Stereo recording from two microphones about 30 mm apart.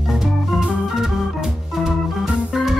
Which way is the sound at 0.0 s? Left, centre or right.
Centre.